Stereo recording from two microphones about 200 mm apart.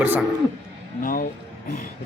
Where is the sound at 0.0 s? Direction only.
10° right (ahead or behind).